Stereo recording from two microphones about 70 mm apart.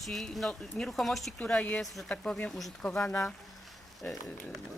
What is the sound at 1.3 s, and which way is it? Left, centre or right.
Speech, centre.